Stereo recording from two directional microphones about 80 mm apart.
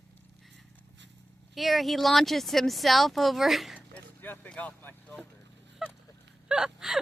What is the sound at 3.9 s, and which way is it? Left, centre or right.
Vehicle, left.